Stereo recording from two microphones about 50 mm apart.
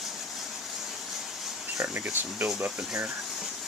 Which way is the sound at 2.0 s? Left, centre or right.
Right.